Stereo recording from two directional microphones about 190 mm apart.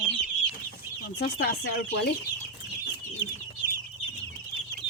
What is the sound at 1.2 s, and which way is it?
Speech, 55° left (ahead or behind).